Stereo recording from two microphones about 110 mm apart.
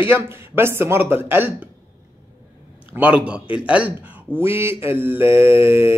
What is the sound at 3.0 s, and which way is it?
A man's voice, 10° right (ahead or behind).